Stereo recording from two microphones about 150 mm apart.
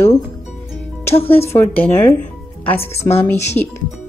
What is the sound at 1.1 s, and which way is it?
Speech, 40° left (ahead or behind).